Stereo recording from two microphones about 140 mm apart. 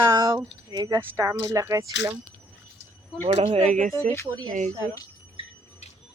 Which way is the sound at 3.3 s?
45° right (ahead or behind).